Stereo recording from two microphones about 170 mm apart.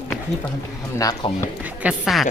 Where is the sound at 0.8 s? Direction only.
20° left (ahead or behind).